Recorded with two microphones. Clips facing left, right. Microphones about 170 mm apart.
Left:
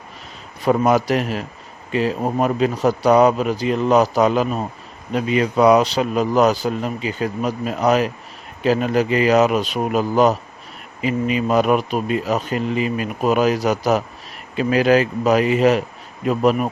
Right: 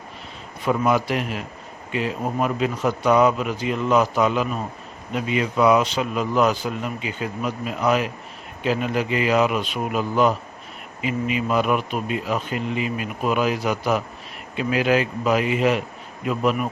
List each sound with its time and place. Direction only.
0.6 s a man's voice: 40° left (ahead or behind)